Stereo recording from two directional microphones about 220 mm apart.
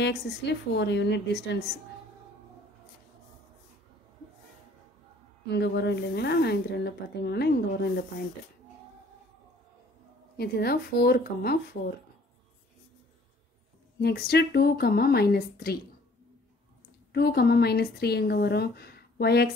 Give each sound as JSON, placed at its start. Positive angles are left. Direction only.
{"t": 0.0, "sound": "speech", "side_deg": 50}
{"t": 5.5, "sound": "speech", "side_deg": 50}
{"t": 10.3, "sound": "speech", "side_deg": 45}
{"t": 13.9, "sound": "speech", "side_deg": 45}
{"t": 17.1, "sound": "speech", "side_deg": 45}